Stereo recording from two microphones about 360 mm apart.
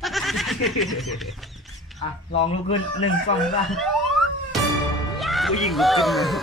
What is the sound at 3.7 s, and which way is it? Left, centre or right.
Car alarm, centre.